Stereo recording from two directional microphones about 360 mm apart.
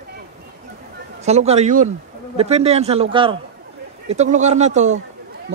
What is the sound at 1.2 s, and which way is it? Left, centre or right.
Speech, centre.